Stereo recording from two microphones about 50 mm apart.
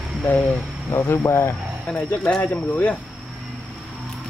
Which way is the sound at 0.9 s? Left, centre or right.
Left.